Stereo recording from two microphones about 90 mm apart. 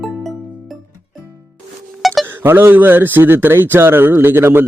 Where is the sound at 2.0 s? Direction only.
Centre (ahead or behind).